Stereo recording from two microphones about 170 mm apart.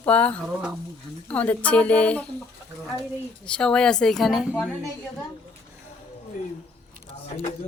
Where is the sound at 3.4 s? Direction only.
5° left (ahead or behind).